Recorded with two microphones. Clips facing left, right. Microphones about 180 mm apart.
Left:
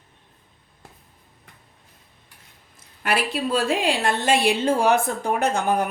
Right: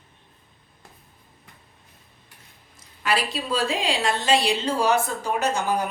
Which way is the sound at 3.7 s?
60° left (ahead or behind).